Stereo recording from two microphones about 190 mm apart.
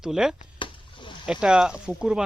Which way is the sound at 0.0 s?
5° right (ahead or behind).